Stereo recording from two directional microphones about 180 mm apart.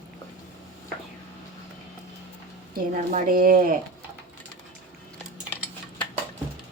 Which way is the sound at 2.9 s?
45° right (ahead or behind).